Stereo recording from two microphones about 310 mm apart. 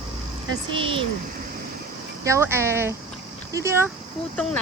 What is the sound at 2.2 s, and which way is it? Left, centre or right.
Speech, centre.